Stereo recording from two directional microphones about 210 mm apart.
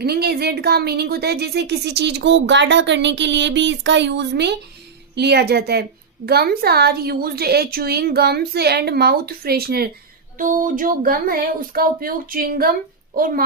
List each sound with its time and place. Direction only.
0.0 s speech: 50° right (ahead or behind)